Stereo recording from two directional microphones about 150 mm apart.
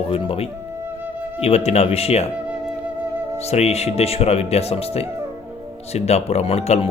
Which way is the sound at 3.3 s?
45° left (ahead or behind).